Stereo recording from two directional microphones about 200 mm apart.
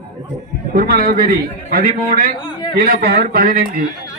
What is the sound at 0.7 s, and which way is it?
A man's voice, 50° right (ahead or behind).